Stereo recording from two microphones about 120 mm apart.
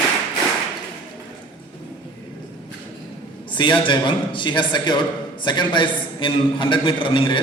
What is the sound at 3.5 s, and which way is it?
A man's voice, 40° left (ahead or behind).